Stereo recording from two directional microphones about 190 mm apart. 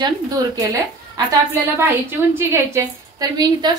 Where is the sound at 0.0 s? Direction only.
20° right (ahead or behind).